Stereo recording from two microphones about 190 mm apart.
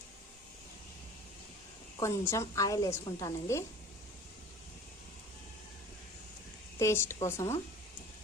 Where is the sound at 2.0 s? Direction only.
15° left (ahead or behind).